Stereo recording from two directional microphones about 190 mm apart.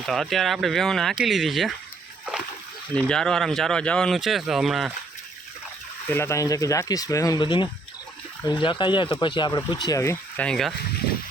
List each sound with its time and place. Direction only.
0.0 s speech: centre (ahead or behind)
3.1 s speech: 5° left (ahead or behind)
6.1 s speech: 15° left (ahead or behind)